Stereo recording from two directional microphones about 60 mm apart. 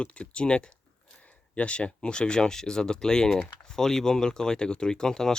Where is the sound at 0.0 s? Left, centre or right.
Centre.